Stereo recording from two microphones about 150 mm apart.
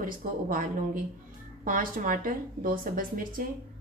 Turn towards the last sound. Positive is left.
turn(degrees=-65)  # may be behind; listen again after turning